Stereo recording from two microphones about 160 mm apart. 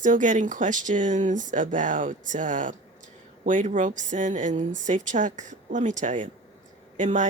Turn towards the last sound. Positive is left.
turn(degrees=-50)  # may be behind; listen again after turning